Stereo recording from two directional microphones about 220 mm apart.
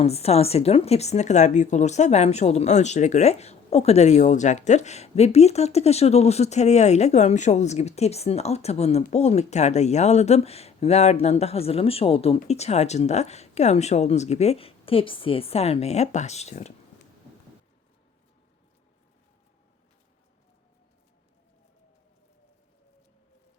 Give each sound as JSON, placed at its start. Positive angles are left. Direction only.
{"t": 0.0, "sound": "speech", "side_deg": 30}